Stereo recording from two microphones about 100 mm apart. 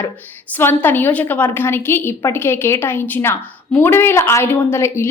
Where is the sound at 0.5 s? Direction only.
20° left (ahead or behind).